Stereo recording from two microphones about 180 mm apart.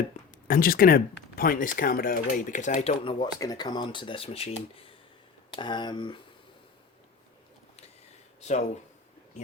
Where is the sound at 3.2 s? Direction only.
20° left (ahead or behind).